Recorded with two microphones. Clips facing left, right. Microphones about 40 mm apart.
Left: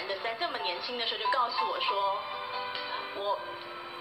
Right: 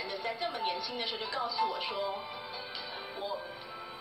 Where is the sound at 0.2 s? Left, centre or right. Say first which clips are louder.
Left 2 dB; left.